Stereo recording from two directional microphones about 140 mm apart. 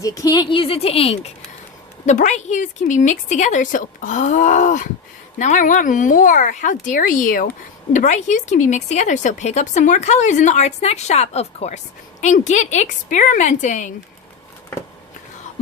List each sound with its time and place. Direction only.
0.0 s speech: 25° left (ahead or behind); by 1.3 s 45° left (ahead or behind)
2.0 s speech: 60° left (ahead or behind); by 7.5 s 75° left (ahead or behind)
7.9 s speech: 60° left (ahead or behind)